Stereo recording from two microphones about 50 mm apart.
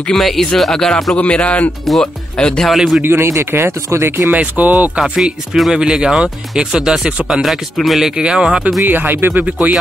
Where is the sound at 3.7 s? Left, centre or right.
Right.